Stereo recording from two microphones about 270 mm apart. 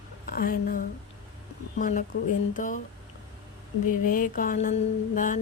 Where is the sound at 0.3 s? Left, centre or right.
Left.